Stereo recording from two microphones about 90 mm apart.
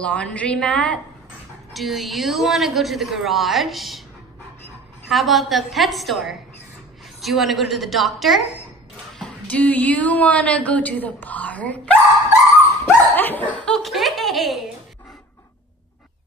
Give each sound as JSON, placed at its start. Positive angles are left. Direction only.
{"t": 0.0, "sound": "a woman's voice", "side_deg": 15}
{"t": 1.7, "sound": "a woman's voice", "side_deg": 0}
{"t": 5.1, "sound": "a woman's voice", "side_deg": 0}
{"t": 9.2, "sound": "a woman's voice", "side_deg": 15}
{"t": 12.8, "sound": "dog", "side_deg": 20}
{"t": 13.7, "sound": "laughter", "side_deg": 0}